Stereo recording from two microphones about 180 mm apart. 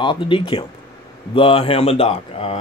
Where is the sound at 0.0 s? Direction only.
25° left (ahead or behind).